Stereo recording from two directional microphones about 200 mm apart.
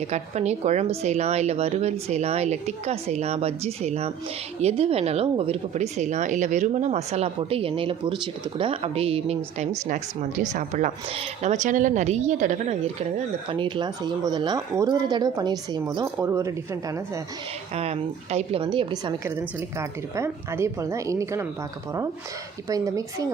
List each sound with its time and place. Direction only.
0.1 s a woman's voice: 35° right (ahead or behind); by 17.0 s 15° right (ahead or behind)
17.7 s a woman's voice: 30° right (ahead or behind)
19.2 s a woman's voice: 15° right (ahead or behind)
22.7 s a woman's voice: 15° right (ahead or behind)